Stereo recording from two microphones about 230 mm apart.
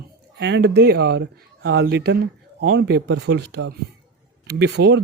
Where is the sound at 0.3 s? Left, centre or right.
Right.